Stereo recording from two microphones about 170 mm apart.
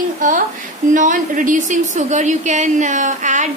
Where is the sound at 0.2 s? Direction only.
50° right (ahead or behind).